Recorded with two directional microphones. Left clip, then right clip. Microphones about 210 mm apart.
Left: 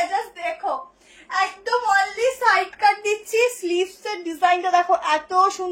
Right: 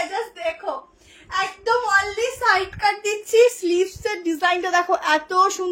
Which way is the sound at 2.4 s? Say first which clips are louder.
Even; 15° right (ahead or behind).